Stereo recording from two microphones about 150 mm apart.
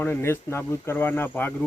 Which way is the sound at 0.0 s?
15° left (ahead or behind).